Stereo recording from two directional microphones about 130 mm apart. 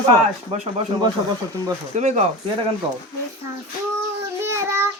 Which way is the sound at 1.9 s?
60° right (ahead or behind).